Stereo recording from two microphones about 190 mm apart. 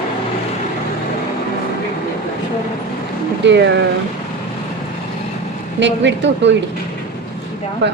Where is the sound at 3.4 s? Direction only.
65° right (ahead or behind).